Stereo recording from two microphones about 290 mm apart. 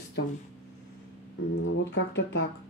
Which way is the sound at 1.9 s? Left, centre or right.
Left.